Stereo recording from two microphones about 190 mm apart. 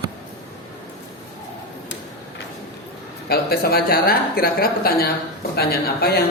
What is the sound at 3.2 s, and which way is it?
Speech, 55° left (ahead or behind).